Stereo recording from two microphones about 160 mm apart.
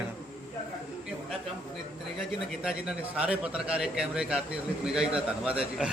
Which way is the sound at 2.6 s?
5° right (ahead or behind).